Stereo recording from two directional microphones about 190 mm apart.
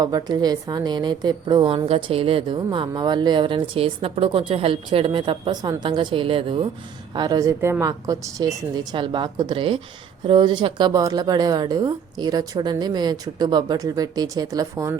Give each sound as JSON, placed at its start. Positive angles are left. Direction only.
{"t": 0.0, "sound": "a woman's voice", "side_deg": -20}